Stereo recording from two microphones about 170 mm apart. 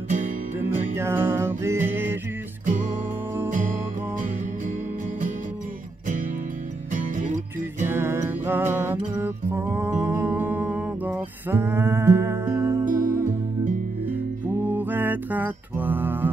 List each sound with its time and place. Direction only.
0.6 s music: 15° right (ahead or behind)
2.6 s music: 50° right (ahead or behind)
6.9 s music: 45° right (ahead or behind)
7.8 s music: 15° right (ahead or behind)
14.5 s music: 10° right (ahead or behind)